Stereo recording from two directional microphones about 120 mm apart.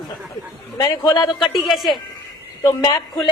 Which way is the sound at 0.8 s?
30° left (ahead or behind).